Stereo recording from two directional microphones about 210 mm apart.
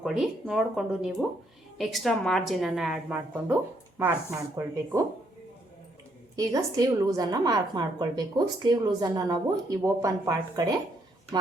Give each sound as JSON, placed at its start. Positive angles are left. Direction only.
{"t": 0.0, "sound": "a woman's voice", "side_deg": -5}
{"t": 6.3, "sound": "a woman's voice", "side_deg": -15}